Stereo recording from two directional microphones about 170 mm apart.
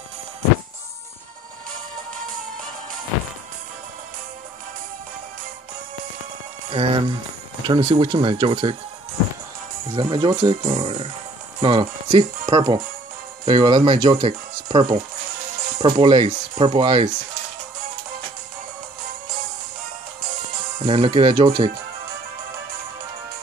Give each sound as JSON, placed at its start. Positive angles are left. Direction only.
{"t": 6.7, "sound": "speech", "side_deg": -30}
{"t": 9.9, "sound": "speech", "side_deg": -30}
{"t": 20.8, "sound": "speech", "side_deg": -30}